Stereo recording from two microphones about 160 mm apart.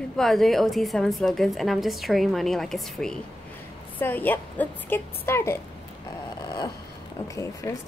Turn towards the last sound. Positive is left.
turn(degrees=20)  # may be behind; listen again after turning